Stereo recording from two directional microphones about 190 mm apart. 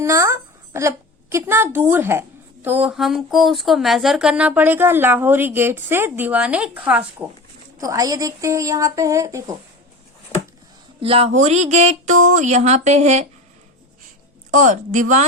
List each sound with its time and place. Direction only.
0.0 s a woman's voice: 15° right (ahead or behind)
7.8 s a woman's voice: 20° right (ahead or behind)
10.3 s a sound: 10° left (ahead or behind)
11.0 s a woman's voice: 30° right (ahead or behind)
14.5 s speech: 40° right (ahead or behind)